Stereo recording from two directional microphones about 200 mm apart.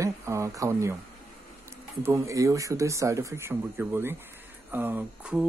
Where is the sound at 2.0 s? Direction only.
15° right (ahead or behind).